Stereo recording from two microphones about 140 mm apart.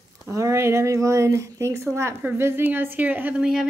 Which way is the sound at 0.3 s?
20° right (ahead or behind).